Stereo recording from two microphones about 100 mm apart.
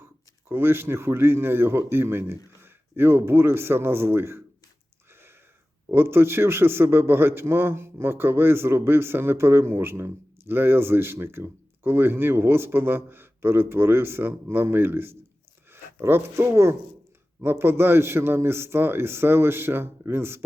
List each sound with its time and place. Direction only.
0.0 s a man's voice: 25° right (ahead or behind)
5.9 s a man's voice: 25° right (ahead or behind)